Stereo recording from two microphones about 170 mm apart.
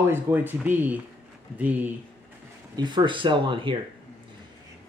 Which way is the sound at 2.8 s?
25° right (ahead or behind).